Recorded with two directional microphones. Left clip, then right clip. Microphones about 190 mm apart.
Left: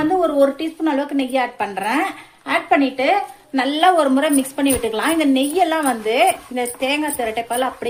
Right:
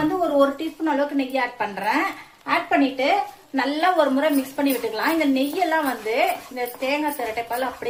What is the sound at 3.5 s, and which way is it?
A woman's voice, 55° left (ahead or behind).